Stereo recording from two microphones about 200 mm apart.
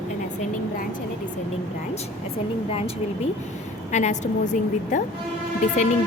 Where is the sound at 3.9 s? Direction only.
35° left (ahead or behind).